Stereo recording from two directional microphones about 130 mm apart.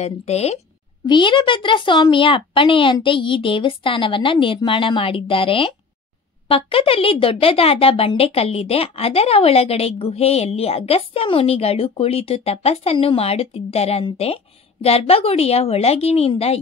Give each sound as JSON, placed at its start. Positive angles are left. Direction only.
{"t": 0.0, "sound": "speech", "side_deg": 55}
{"t": 1.0, "sound": "a woman's voice", "side_deg": 40}